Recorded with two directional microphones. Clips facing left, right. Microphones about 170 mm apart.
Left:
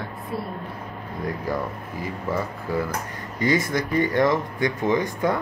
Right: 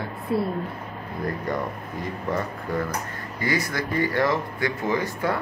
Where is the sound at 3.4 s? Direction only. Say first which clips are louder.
Left 4 dB; 20° left (ahead or behind).